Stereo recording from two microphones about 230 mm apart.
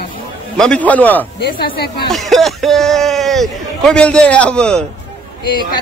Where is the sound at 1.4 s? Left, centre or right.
Left.